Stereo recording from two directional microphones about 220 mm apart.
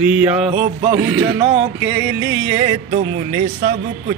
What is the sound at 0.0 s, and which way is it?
Music, 5° right (ahead or behind).